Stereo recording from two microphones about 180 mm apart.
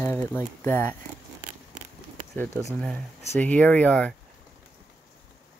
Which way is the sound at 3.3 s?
10° left (ahead or behind).